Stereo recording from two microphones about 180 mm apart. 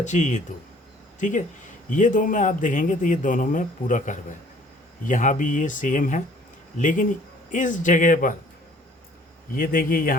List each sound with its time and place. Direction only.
0.0 s a man's voice: 40° left (ahead or behind)
9.6 s a man's voice: 50° left (ahead or behind)